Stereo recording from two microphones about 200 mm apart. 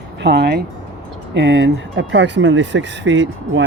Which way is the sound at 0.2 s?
55° right (ahead or behind).